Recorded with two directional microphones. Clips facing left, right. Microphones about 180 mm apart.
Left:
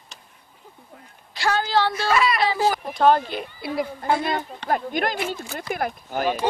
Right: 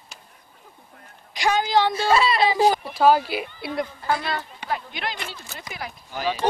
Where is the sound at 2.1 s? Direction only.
30° right (ahead or behind).